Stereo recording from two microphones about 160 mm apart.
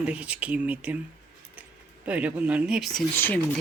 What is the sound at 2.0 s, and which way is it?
Speech, 10° right (ahead or behind).